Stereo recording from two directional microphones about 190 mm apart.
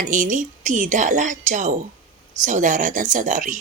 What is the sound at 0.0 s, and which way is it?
Speech, 40° right (ahead or behind).